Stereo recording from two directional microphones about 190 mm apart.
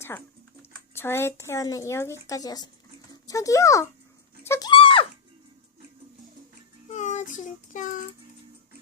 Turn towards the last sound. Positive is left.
turn(degrees=40)  # may be behind; listen again after turning